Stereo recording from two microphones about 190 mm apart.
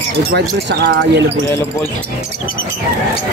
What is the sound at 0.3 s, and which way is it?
Speech, 65° right (ahead or behind).